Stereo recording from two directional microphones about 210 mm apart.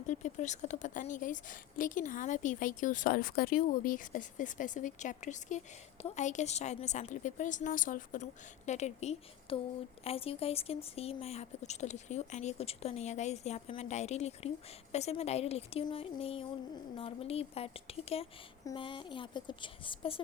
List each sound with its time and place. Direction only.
0.1 s a woman's voice: 35° left (ahead or behind)